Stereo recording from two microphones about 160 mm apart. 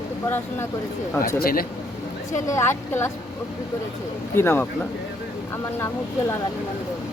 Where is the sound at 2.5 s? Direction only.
15° left (ahead or behind).